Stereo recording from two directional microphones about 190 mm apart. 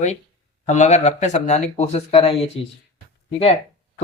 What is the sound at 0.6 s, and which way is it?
Speech, 40° left (ahead or behind).